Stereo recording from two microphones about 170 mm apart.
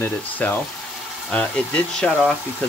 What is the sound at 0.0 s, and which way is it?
Speech, 10° left (ahead or behind).